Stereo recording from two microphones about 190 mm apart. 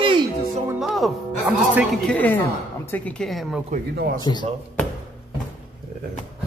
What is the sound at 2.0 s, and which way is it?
A woman's voice, 10° left (ahead or behind).